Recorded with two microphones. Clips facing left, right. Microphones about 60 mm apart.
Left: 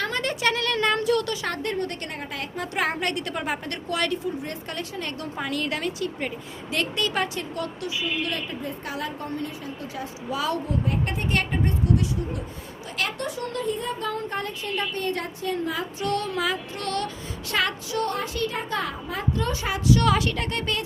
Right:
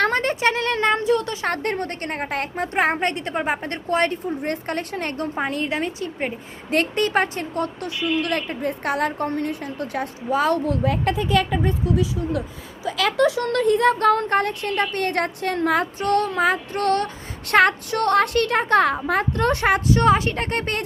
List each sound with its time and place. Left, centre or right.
0.0 s a woman's voice: right
1.5 s a woman's voice: right
2.6 s a woman's voice: right
7.9 s speech: right
10.2 s a woman's voice: right
10.7 s speech: right
13.1 s speech: right
16.0 s a woman's voice: right
17.5 s speech: right
19.9 s a woman's voice: right